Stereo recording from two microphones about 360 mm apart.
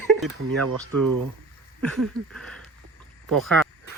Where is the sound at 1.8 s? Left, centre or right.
Centre.